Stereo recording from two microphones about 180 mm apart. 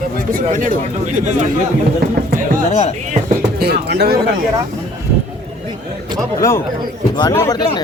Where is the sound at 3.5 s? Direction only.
60° right (ahead or behind).